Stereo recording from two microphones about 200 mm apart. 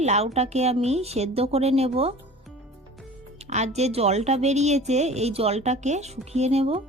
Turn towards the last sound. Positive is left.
turn(degrees=-30)  # may be behind; listen again after turning